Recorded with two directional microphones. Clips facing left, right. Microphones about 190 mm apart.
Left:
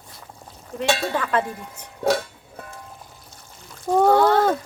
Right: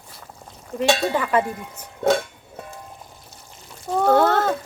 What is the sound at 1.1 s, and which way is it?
Cowbell, 10° right (ahead or behind).